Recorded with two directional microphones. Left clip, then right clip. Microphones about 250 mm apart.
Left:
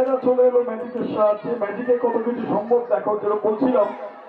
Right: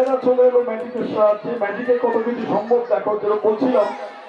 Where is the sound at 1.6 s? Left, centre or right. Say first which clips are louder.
Right 2 dB; centre.